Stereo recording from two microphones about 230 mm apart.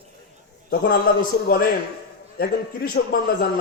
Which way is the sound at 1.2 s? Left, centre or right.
Left.